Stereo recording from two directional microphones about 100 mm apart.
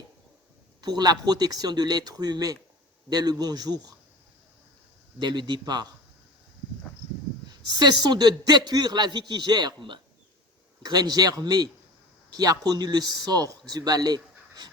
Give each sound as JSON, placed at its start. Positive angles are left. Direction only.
{"t": 0.8, "sound": "a man's voice", "side_deg": -45}
{"t": 5.2, "sound": "a man's voice", "side_deg": -50}
{"t": 7.4, "sound": "a man's voice", "side_deg": -45}